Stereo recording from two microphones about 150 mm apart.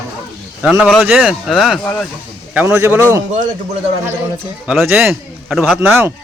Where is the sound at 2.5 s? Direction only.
15° right (ahead or behind).